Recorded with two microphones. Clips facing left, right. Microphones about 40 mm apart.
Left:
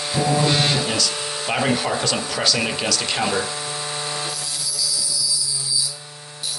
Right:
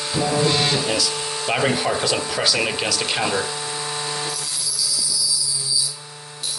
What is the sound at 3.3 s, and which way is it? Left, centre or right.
Tools, centre.